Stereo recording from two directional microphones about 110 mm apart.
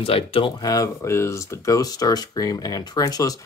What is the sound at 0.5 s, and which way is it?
Speech, 35° left (ahead or behind).